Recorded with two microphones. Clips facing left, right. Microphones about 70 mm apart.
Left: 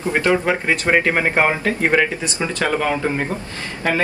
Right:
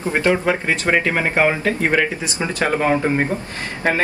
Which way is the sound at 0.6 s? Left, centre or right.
Left.